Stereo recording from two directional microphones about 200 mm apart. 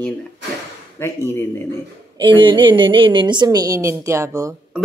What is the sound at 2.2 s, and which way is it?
A woman's voice, 25° right (ahead or behind).